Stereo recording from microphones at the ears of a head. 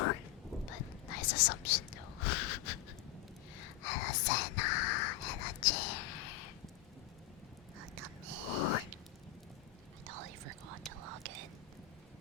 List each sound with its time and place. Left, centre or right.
0.7 s whispering: left
7.8 s whispering: right
8.4 s whispering: left
10.1 s whispering: right